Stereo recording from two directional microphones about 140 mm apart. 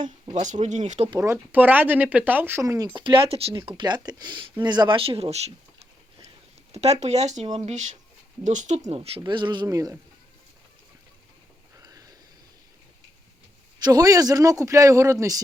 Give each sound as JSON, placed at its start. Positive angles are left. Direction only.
{"t": 0.4, "sound": "speech", "side_deg": -60}
{"t": 1.2, "sound": "speech", "side_deg": -15}
{"t": 6.7, "sound": "speech", "side_deg": -50}
{"t": 8.9, "sound": "speech", "side_deg": -45}
{"t": 11.8, "sound": "sniff", "side_deg": -25}
{"t": 13.8, "sound": "speech", "side_deg": -25}